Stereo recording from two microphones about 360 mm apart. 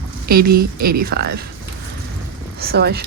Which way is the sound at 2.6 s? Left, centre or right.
Right.